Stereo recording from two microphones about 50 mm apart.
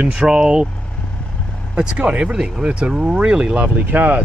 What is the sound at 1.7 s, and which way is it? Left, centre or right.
Speech, centre.